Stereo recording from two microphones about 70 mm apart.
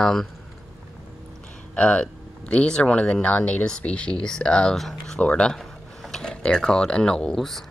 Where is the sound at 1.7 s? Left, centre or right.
Centre.